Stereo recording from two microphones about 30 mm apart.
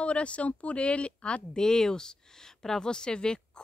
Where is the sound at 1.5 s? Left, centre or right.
Centre.